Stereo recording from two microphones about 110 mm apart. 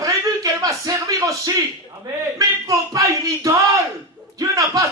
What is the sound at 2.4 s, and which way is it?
Speech, 30° right (ahead or behind).